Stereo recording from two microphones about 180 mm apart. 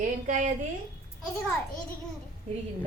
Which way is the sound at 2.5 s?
40° right (ahead or behind).